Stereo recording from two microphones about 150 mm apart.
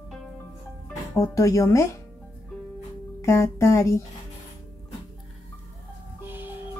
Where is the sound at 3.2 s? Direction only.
20° left (ahead or behind).